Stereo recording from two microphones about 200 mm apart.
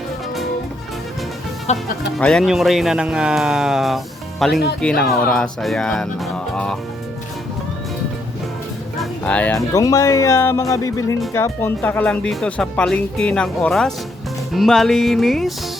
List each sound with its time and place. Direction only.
1.7 s speech: 35° left (ahead or behind)
2.0 s speech: 5° left (ahead or behind)
9.0 s speech: 5° left (ahead or behind)